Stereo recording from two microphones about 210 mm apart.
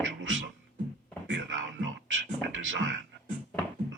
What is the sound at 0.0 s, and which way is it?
Beatboxing, 65° right (ahead or behind).